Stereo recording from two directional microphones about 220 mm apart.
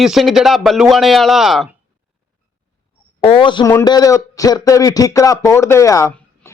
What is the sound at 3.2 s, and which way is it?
A man's voice, 25° left (ahead or behind).